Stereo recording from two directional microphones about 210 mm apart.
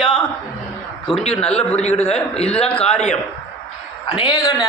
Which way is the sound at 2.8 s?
30° left (ahead or behind).